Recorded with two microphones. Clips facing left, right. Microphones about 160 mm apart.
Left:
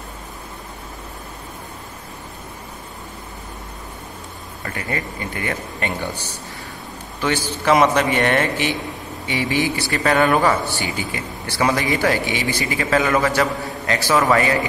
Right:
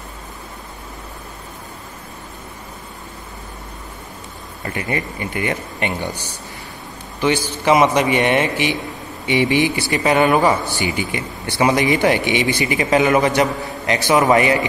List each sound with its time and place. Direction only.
4.6 s a man's voice: 20° right (ahead or behind)